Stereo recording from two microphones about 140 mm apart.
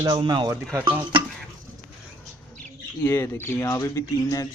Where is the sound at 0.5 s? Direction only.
15° right (ahead or behind).